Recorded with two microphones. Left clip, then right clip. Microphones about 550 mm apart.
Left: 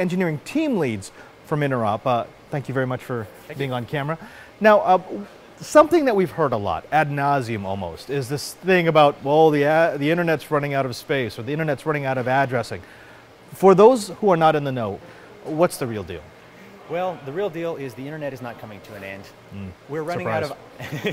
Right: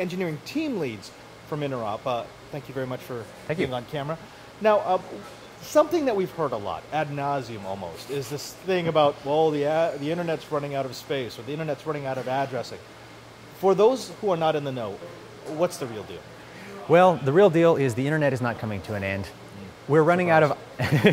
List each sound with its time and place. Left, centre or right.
0.0 s speech: left
16.9 s speech: right